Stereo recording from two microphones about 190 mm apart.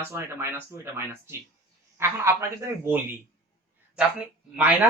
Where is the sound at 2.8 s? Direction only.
10° right (ahead or behind).